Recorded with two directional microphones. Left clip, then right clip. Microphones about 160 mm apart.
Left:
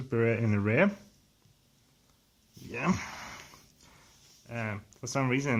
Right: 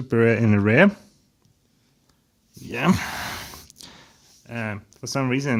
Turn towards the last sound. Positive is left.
turn(degrees=-20)  # may be behind; listen again after turning